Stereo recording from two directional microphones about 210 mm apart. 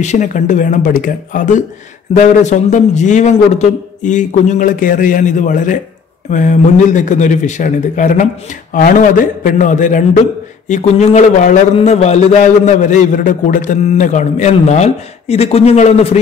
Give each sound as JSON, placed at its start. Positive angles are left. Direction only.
{"t": 0.0, "sound": "a man's voice", "side_deg": 35}